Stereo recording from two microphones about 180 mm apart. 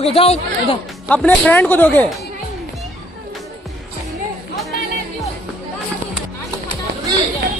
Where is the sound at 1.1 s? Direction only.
5° left (ahead or behind).